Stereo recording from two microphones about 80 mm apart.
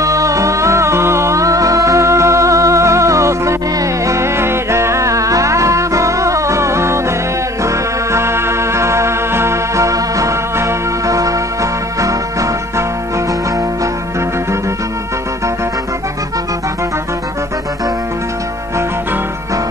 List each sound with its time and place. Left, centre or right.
0.0 s music: right